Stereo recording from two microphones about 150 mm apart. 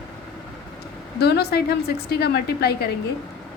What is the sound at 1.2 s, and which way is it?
A woman's voice, 90° left.